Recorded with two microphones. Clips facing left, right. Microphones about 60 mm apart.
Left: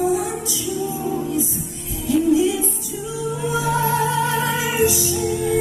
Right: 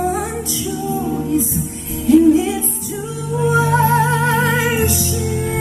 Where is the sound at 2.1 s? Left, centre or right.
Right.